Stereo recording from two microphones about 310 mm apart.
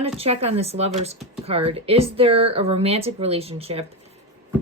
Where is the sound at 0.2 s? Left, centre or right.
Centre.